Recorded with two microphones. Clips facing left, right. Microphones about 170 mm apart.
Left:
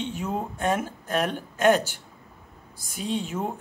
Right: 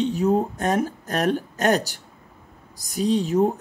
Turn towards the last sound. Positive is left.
turn(degrees=-40)  # may be behind; listen again after turning